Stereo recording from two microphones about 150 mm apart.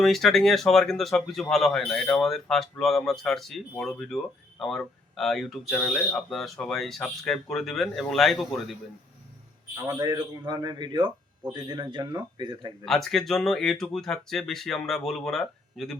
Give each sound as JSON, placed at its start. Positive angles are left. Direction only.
{"t": 0.0, "sound": "speech", "side_deg": 0}
{"t": 9.7, "sound": "a man's voice", "side_deg": -25}
{"t": 12.8, "sound": "speech", "side_deg": 0}